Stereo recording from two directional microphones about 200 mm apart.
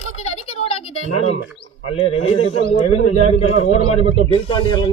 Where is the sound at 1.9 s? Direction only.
30° left (ahead or behind).